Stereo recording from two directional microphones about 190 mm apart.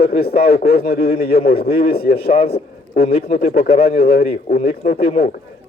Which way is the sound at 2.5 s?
55° left (ahead or behind).